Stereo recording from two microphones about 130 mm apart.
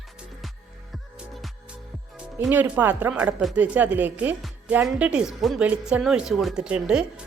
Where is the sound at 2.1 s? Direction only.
10° right (ahead or behind).